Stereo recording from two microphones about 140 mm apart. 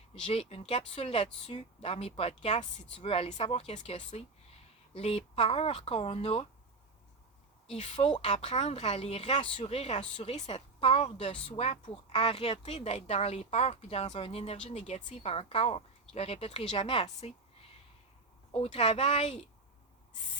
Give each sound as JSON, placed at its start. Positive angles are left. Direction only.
{"t": 0.1, "sound": "speech", "side_deg": 45}
{"t": 7.7, "sound": "speech", "side_deg": 50}
{"t": 18.5, "sound": "speech", "side_deg": 45}